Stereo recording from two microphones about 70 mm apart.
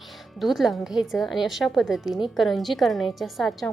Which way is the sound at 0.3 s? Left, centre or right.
Centre.